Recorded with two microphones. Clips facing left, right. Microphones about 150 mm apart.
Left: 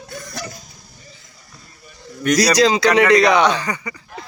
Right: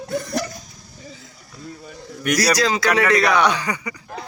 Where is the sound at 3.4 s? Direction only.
10° right (ahead or behind).